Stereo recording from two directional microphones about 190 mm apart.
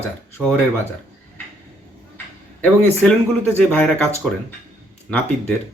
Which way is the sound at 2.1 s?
10° left (ahead or behind).